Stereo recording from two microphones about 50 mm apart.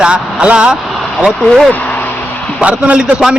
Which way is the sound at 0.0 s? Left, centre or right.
Centre.